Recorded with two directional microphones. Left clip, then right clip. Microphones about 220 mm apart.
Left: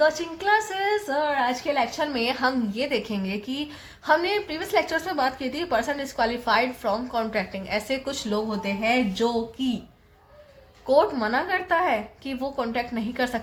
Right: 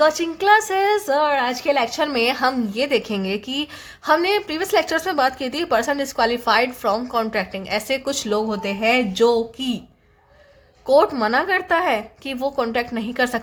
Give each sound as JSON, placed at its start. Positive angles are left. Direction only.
{"t": 0.0, "sound": "a woman's voice", "side_deg": -40}
{"t": 10.8, "sound": "a woman's voice", "side_deg": -40}